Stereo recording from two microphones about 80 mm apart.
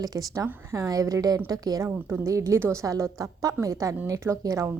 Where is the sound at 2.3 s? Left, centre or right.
Right.